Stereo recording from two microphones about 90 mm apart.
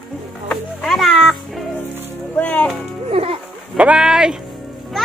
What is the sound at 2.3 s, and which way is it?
Music, 20° left (ahead or behind).